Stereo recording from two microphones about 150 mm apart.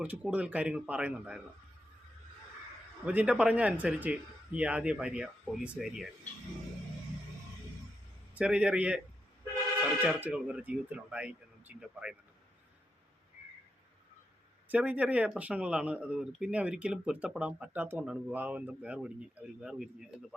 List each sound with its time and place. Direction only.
0.0 s speech: 10° right (ahead or behind)
3.1 s speech: 10° right (ahead or behind)
8.4 s speech: 5° right (ahead or behind)
10.0 s speech: 10° right (ahead or behind)
14.7 s speech: 10° right (ahead or behind)